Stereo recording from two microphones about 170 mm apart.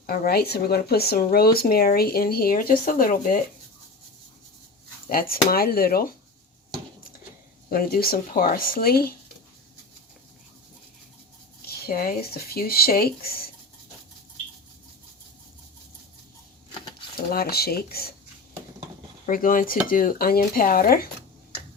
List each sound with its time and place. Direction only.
0.0 s speech: 60° left (ahead or behind)
5.0 s speech: 60° left (ahead or behind)
7.7 s speech: 60° left (ahead or behind)
11.6 s speech: 65° left (ahead or behind)
17.2 s speech: 65° left (ahead or behind)
19.2 s speech: 55° left (ahead or behind)